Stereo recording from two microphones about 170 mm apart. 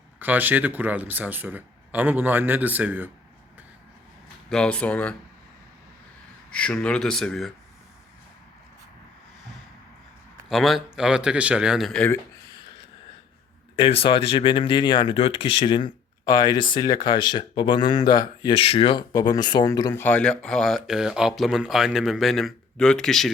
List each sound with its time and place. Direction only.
0.2 s speech: 10° right (ahead or behind)
4.4 s speech: 5° left (ahead or behind)
6.5 s speech: 5° left (ahead or behind)
10.5 s speech: centre (ahead or behind)
13.7 s speech: 30° left (ahead or behind); by 23.3 s centre (ahead or behind)